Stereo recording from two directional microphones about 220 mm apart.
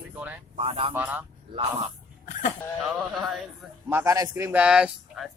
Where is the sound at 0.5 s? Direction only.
25° right (ahead or behind).